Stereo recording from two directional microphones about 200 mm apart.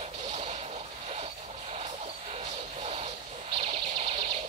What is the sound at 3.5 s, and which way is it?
Bird, 30° right (ahead or behind).